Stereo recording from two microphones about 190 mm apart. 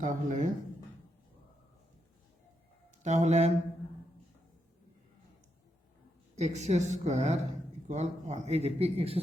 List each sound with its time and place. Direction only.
0.0 s speech: 40° right (ahead or behind)
3.0 s a man's voice: 35° right (ahead or behind)
6.3 s a man's voice: 35° right (ahead or behind)